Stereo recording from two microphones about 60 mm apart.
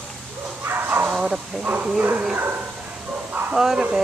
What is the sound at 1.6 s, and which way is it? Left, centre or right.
Speech, right.